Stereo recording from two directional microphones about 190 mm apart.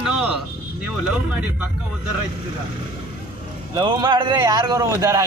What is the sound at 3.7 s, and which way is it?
Speech, 20° right (ahead or behind).